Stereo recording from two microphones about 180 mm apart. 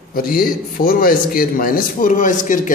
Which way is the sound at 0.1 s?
55° left (ahead or behind).